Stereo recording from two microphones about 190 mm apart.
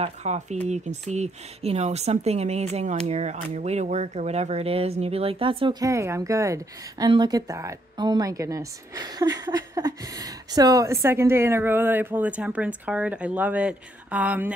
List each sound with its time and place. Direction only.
0.0 s speech: 35° right (ahead or behind); by 14.5 s 10° right (ahead or behind)